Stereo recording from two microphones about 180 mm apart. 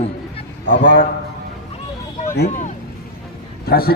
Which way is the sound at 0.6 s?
75° left (ahead or behind).